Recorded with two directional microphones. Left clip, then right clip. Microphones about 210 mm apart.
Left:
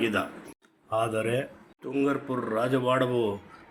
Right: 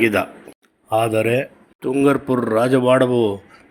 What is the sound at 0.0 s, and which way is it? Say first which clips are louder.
Speech: right 10 dB; 25° right (ahead or behind).